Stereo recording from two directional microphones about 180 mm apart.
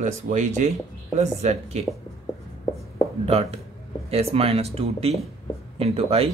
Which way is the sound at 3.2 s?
35° right (ahead or behind).